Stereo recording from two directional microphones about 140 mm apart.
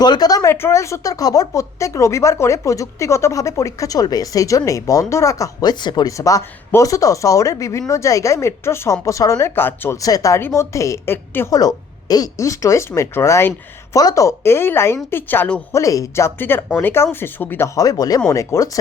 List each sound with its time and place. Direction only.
0.0 s speech: 30° left (ahead or behind); by 15.6 s 10° left (ahead or behind)
15.7 s speech: 25° left (ahead or behind)
17.7 s speech: 25° left (ahead or behind)